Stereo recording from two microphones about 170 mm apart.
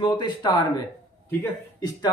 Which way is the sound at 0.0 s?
25° left (ahead or behind).